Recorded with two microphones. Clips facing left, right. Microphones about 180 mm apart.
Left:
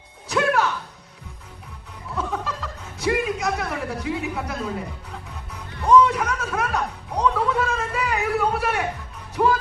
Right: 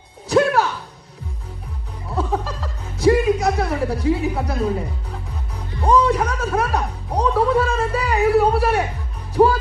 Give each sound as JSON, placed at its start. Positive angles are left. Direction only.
{"t": 0.3, "sound": "music", "side_deg": -35}
{"t": 2.1, "sound": "music", "side_deg": -35}